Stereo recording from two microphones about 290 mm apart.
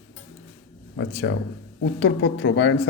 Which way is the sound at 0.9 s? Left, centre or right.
Left.